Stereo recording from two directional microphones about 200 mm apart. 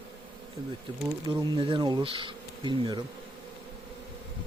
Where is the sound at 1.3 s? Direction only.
25° right (ahead or behind).